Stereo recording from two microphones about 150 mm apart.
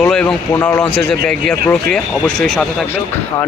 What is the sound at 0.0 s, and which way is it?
A man's voice, 5° left (ahead or behind).